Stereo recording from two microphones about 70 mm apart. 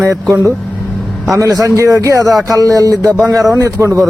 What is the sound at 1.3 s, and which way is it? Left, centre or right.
Speech, right.